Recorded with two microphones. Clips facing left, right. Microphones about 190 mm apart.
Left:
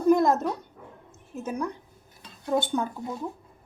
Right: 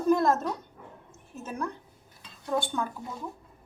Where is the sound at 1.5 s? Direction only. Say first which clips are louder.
Left 4 dB; 15° left (ahead or behind).